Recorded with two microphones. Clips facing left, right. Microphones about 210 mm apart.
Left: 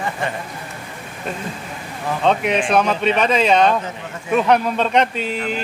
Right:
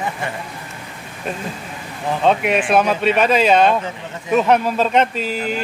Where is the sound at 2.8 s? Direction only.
5° right (ahead or behind).